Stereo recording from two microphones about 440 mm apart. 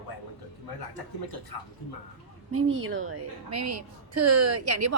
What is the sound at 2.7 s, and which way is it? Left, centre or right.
A woman's voice, right.